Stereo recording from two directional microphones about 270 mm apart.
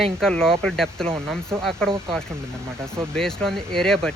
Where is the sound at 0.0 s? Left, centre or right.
Centre.